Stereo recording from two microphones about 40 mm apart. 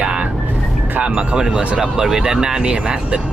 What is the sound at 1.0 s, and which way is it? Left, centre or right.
Speech, right.